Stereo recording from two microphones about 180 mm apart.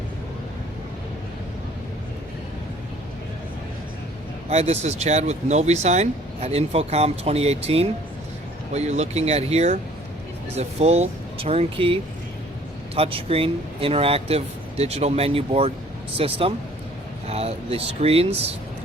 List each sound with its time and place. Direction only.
4.4 s speech: 35° right (ahead or behind)
13.0 s speech: 30° right (ahead or behind)